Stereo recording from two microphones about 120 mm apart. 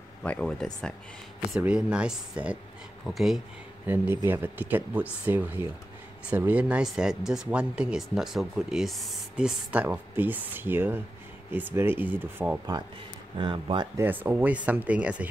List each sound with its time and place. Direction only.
0.2 s speech: 10° left (ahead or behind)
1.6 s speech: 10° right (ahead or behind)
3.8 s speech: 15° right (ahead or behind)
13.4 s speech: 40° right (ahead or behind)
13.9 s speech: 15° right (ahead or behind)